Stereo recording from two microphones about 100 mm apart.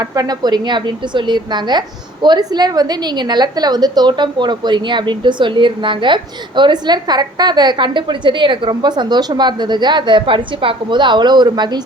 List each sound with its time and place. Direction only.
0.0 s a woman's voice: 40° right (ahead or behind)